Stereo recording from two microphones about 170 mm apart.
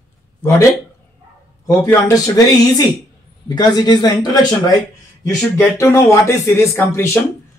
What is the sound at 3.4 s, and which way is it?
A man's voice, 25° left (ahead or behind).